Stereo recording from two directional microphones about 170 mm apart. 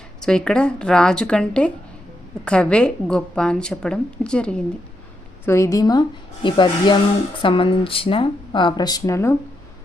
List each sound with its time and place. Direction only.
0.2 s a woman's voice: 5° left (ahead or behind)
5.5 s speech: 20° left (ahead or behind)